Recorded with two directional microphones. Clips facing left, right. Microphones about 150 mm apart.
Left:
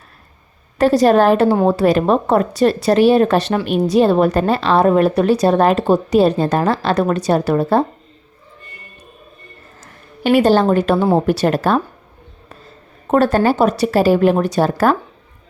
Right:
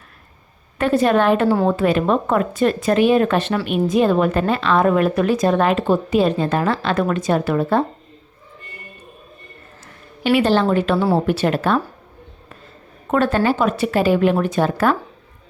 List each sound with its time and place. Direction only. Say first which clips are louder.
0.8 s a woman's voice: left 4 dB; 35° left (ahead or behind)
10.2 s a woman's voice: left 4 dB; 45° left (ahead or behind)
10.9 s speech: left 3 dB; 20° left (ahead or behind)
11.3 s a woman's voice: left 3 dB; 40° left (ahead or behind)
13.1 s a woman's voice: left 4 dB; 40° left (ahead or behind)